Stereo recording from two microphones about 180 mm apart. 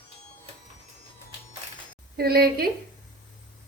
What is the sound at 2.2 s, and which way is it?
Speech, 60° right (ahead or behind).